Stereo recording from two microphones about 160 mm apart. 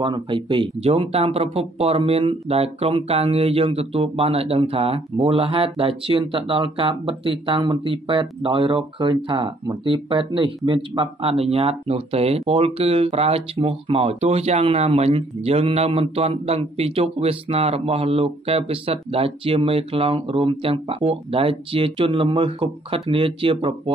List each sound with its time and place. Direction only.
0.0 s speech: 30° right (ahead or behind)